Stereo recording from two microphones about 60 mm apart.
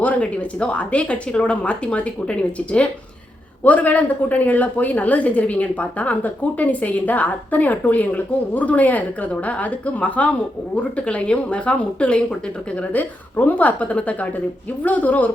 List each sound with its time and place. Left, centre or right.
0.0 s a woman's voice: left